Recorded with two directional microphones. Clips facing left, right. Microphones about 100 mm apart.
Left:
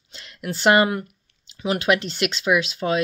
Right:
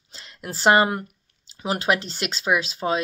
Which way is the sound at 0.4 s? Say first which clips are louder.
Left 1 dB; 30° right (ahead or behind).